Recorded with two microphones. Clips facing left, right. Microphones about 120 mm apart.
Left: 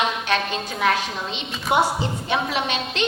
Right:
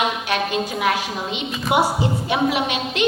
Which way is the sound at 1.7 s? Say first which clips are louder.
Right 1 dB; 90° right.